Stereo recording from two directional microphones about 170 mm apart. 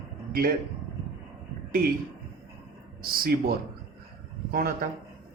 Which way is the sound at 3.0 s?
60° right (ahead or behind).